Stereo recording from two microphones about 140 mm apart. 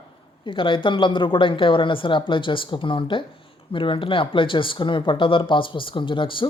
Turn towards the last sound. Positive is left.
turn(degrees=35)  # may be behind; listen again after turning